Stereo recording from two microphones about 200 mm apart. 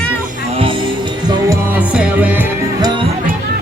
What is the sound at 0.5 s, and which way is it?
Music, 25° right (ahead or behind).